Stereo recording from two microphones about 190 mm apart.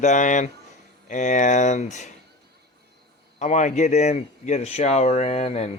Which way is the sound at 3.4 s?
40° left (ahead or behind).